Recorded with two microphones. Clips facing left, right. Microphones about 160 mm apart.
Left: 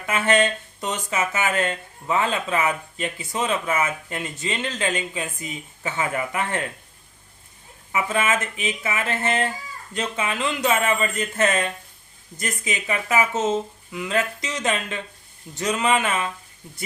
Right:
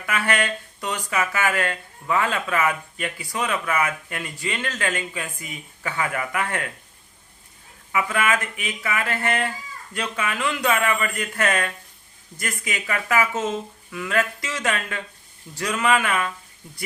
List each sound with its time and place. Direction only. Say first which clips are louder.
0.0 s speech: left 4 dB; 25° left (ahead or behind)
7.9 s speech: even; 25° left (ahead or behind)